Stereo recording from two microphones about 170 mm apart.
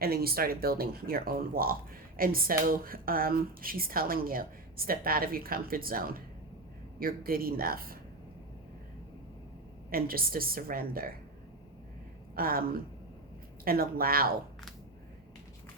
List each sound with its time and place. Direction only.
0.0 s speech: 65° right (ahead or behind)
9.9 s speech: 60° right (ahead or behind)
12.4 s speech: 60° right (ahead or behind)